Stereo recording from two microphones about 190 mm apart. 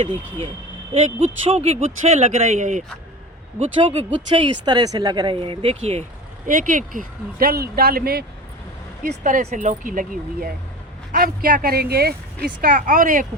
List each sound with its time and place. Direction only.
0.0 s speech: 30° right (ahead or behind)
6.5 s speech: 45° right (ahead or behind)
9.2 s speech: 40° right (ahead or behind)